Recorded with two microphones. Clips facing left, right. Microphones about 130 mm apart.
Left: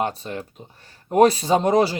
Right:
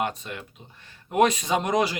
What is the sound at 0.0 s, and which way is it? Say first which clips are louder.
Speech: left 4 dB; 35° left (ahead or behind).